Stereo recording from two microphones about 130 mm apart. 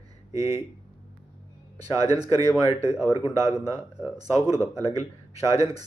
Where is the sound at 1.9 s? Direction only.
30° right (ahead or behind).